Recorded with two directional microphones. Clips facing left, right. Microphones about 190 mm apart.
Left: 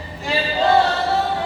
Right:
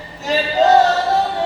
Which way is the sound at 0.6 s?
45° right (ahead or behind).